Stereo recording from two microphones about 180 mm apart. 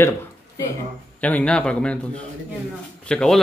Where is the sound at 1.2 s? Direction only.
10° left (ahead or behind).